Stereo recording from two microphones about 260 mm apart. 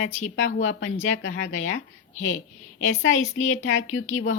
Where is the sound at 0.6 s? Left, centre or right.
Left.